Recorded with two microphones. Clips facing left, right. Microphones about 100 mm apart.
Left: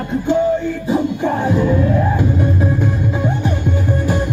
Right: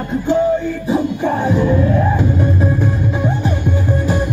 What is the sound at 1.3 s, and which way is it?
Music, 15° right (ahead or behind).